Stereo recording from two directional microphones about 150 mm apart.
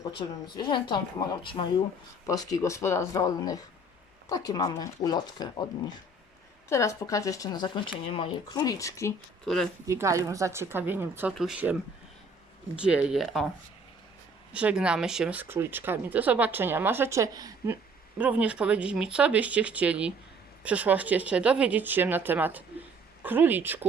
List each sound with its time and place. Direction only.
0.0 s a woman's voice: 30° left (ahead or behind)
2.2 s speech: 25° left (ahead or behind)
6.7 s speech: 20° left (ahead or behind)
9.8 s speech: 20° right (ahead or behind); by 13.4 s centre (ahead or behind)
14.5 s speech: 10° right (ahead or behind)
18.2 s speech: 10° right (ahead or behind)